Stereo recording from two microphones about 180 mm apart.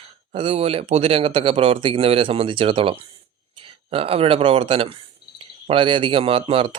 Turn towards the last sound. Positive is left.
turn(degrees=-30)  # may be behind; listen again after turning